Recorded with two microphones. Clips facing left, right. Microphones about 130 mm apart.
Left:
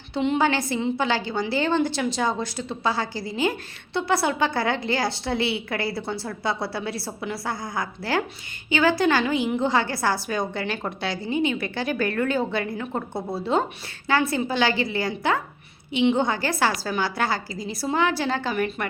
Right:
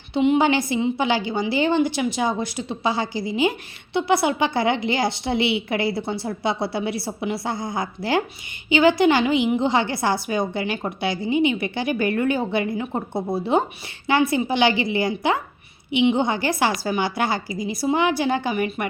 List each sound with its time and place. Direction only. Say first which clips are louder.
0.1 s a woman's voice: right 4 dB; 15° right (ahead or behind)